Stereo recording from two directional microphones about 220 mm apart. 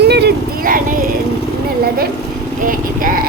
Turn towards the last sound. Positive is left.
turn(degrees=-40)  # may be behind; listen again after turning